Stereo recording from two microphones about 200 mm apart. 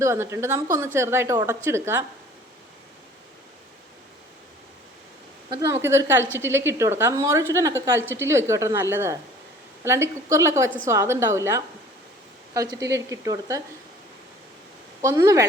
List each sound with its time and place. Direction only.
0.0 s a woman's voice: 15° right (ahead or behind)
5.5 s a woman's voice: 15° right (ahead or behind)
15.0 s a woman's voice: 15° right (ahead or behind)